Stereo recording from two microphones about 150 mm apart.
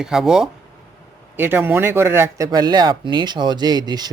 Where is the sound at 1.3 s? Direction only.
15° right (ahead or behind).